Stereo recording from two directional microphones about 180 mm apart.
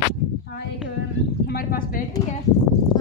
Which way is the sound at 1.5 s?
55° left (ahead or behind).